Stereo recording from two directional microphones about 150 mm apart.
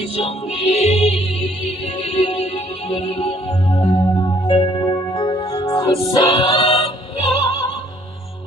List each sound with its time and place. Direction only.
0.2 s music: 40° left (ahead or behind)